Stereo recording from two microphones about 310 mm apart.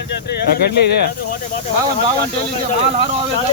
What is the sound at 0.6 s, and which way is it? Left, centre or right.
Speech, left.